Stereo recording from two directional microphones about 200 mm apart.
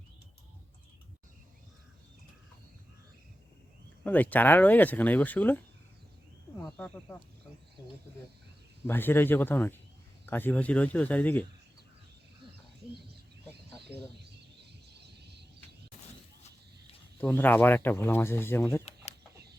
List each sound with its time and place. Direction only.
4.0 s speech: 10° left (ahead or behind)
6.7 s speech: 5° left (ahead or behind)
8.9 s speech: 10° left (ahead or behind)
12.9 s bird: 55° right (ahead or behind)
13.8 s speech: 55° right (ahead or behind)
14.9 s a sound: 55° right (ahead or behind)
17.2 s speech: 5° left (ahead or behind)